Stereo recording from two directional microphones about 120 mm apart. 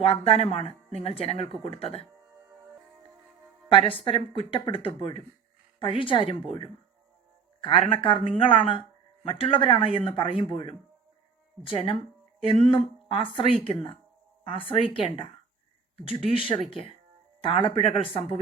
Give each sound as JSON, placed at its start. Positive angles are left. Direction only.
{"t": 0.0, "sound": "speech", "side_deg": 55}
{"t": 3.7, "sound": "a woman's voice", "side_deg": 45}
{"t": 7.6, "sound": "speech", "side_deg": 45}